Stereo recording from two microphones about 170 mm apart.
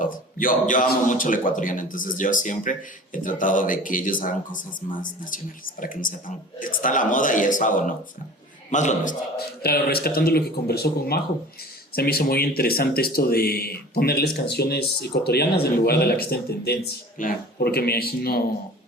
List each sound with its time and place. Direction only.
0.0 s speech: 55° left (ahead or behind)
9.6 s speech: 65° left (ahead or behind)